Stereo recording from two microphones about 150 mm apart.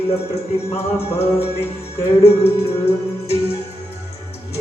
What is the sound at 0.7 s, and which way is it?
Music, 40° left (ahead or behind).